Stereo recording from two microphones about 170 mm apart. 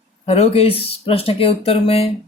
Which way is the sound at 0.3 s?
40° left (ahead or behind).